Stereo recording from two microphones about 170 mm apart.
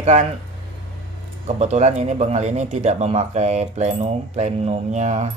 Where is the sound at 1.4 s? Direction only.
40° right (ahead or behind).